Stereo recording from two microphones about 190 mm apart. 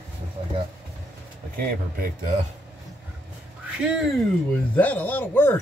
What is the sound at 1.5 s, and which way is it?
Speech, 50° right (ahead or behind).